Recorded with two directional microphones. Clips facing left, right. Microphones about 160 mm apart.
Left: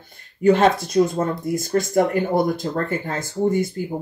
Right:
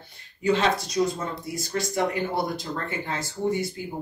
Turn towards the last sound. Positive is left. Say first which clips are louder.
# left 6 dB
turn(degrees=50)  # may be behind; listen again after turning